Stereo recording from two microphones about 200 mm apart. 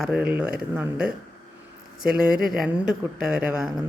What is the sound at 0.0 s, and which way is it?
Speech, 5° right (ahead or behind).